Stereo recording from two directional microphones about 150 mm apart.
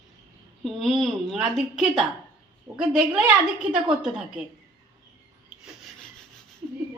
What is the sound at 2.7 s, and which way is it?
Speech, 20° right (ahead or behind).